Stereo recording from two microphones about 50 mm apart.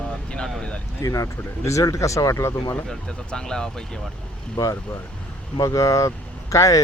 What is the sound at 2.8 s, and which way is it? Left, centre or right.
Speech, centre.